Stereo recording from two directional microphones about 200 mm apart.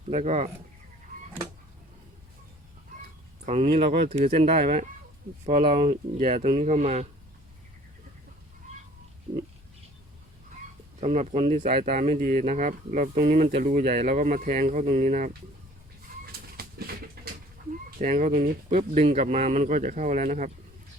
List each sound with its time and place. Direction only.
0.1 s speech: 35° right (ahead or behind)
3.4 s speech: 30° right (ahead or behind)
9.3 s pig: 45° right (ahead or behind)
11.0 s speech: 35° right (ahead or behind)
16.2 s chicken: 50° right (ahead or behind)
18.0 s speech: 40° right (ahead or behind)